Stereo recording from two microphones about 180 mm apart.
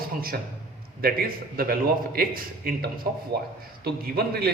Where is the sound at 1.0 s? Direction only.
55° right (ahead or behind).